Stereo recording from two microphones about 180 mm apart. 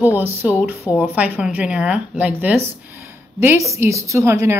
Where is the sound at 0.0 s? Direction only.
10° right (ahead or behind).